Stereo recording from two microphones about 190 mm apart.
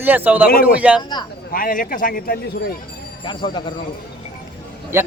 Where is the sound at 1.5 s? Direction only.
45° left (ahead or behind).